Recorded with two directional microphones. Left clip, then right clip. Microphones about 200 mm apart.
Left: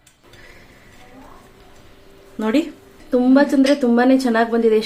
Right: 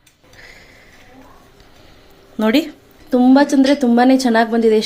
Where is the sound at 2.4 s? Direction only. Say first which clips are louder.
Right 3 dB; 40° right (ahead or behind).